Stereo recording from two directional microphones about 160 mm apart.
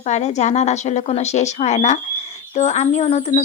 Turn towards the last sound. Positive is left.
turn(degrees=45)  # may be behind; listen again after turning